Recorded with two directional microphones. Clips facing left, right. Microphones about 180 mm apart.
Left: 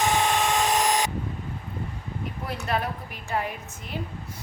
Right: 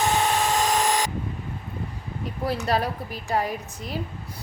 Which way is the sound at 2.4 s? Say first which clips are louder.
Right 5 dB; 35° right (ahead or behind).